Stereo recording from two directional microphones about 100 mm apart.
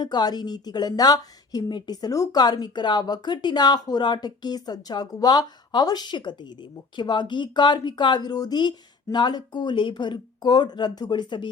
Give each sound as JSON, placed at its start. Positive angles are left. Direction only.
{"t": 0.0, "sound": "a woman's voice", "side_deg": 45}